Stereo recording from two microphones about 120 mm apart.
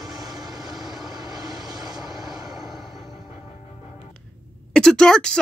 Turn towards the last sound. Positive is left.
turn(degrees=5)  # may be behind; listen again after turning